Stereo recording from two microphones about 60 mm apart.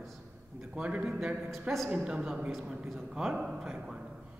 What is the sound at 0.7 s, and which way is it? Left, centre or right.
A man's voice, centre.